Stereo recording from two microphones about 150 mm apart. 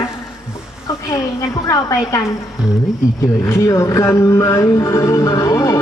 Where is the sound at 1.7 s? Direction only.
25° left (ahead or behind).